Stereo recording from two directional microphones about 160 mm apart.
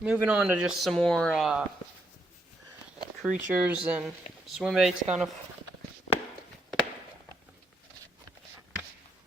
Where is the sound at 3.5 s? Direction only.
10° right (ahead or behind).